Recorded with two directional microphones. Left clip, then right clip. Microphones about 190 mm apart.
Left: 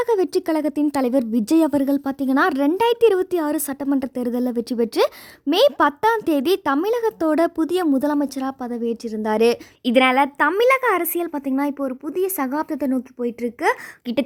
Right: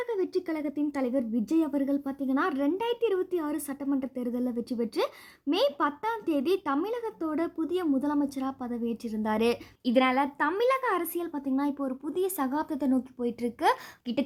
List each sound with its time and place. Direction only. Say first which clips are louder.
0.0 s speech: left 11 dB; 60° left (ahead or behind); by 14.3 s 30° left (ahead or behind)